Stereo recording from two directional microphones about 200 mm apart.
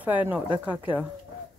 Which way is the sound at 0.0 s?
10° right (ahead or behind).